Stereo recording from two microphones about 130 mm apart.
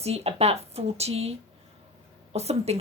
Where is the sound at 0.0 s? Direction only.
50° right (ahead or behind).